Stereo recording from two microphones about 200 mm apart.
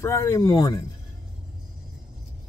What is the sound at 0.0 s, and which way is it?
Speech, 15° left (ahead or behind).